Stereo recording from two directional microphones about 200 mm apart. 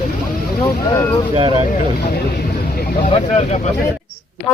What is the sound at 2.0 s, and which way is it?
Speech, 50° left (ahead or behind).